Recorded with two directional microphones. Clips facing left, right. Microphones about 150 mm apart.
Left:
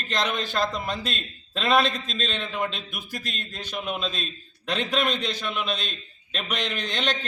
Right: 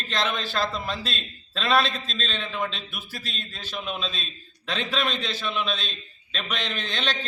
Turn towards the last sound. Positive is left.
turn(degrees=15)  # may be behind; listen again after turning